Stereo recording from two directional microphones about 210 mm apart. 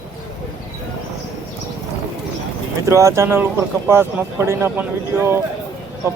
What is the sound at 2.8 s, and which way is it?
Speech, 15° right (ahead or behind).